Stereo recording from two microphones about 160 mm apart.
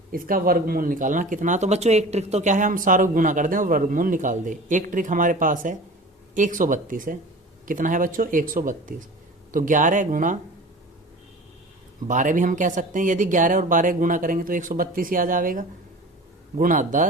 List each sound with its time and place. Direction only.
0.1 s speech: 65° right (ahead or behind)
12.0 s speech: 50° right (ahead or behind)